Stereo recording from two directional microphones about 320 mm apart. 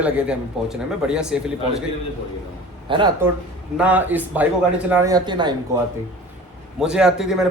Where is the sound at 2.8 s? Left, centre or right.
Centre.